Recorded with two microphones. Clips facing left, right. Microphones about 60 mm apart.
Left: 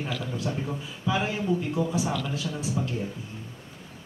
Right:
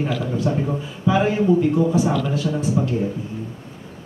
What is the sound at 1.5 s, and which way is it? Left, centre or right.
Speech, right.